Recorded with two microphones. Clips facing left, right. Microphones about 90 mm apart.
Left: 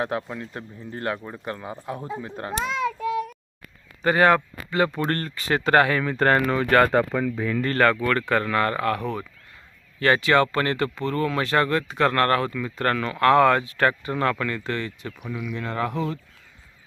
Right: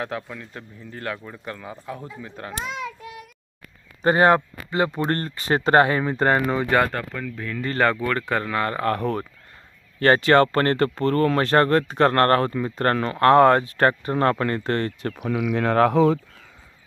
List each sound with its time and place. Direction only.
0.0 s speech: 15° left (ahead or behind)
2.4 s a sound: 30° left (ahead or behind)
4.0 s speech: 30° right (ahead or behind); by 6.8 s 15° right (ahead or behind)
7.1 s speech: 20° left (ahead or behind)
7.6 s speech: 20° right (ahead or behind)
8.8 s speech: 35° right (ahead or behind)
15.2 s speech: 85° right